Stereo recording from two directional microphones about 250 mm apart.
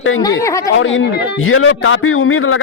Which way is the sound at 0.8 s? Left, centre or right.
Left.